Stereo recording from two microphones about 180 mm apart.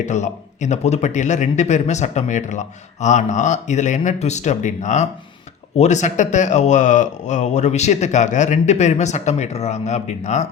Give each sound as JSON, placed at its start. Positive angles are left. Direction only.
{"t": 0.0, "sound": "a man's voice", "side_deg": 40}